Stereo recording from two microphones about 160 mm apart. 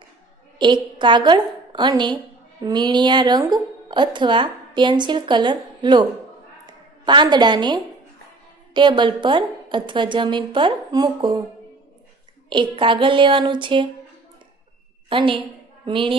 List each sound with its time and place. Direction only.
0.9 s a woman's voice: 30° right (ahead or behind)
12.4 s a woman's voice: 30° right (ahead or behind)
15.0 s a woman's voice: 30° right (ahead or behind)